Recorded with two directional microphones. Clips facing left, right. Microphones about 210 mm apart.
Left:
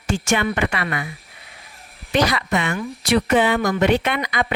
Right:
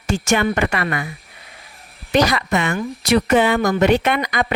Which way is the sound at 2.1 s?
45° right (ahead or behind).